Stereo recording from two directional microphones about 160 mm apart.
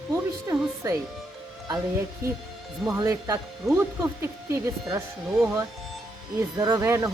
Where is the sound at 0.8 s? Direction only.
20° right (ahead or behind).